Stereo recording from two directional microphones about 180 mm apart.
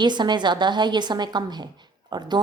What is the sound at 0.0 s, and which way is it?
A woman's voice, 25° right (ahead or behind).